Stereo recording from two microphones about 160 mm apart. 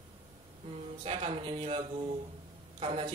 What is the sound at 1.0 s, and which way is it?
Speech, 35° right (ahead or behind).